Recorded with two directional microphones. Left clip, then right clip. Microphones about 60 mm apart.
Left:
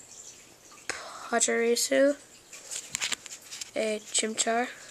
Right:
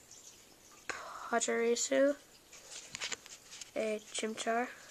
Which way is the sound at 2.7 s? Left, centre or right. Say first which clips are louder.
Left 9 dB; centre.